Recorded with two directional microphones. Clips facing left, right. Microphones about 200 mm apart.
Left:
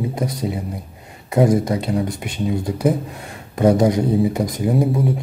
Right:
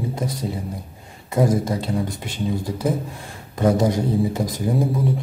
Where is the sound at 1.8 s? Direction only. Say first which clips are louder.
Left 3 dB; 20° left (ahead or behind).